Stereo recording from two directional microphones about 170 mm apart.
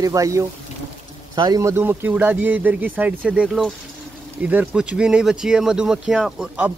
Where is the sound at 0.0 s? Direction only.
20° right (ahead or behind).